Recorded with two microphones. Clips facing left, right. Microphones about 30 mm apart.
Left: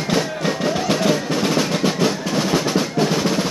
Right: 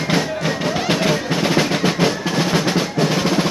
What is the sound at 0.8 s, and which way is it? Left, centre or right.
Music, right.